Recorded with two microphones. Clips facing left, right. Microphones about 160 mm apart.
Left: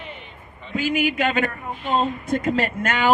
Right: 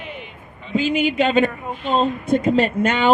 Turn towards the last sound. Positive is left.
turn(degrees=-20)  # may be behind; listen again after turning